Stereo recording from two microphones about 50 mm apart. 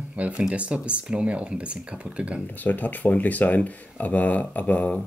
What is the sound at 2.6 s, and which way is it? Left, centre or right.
Speech, left.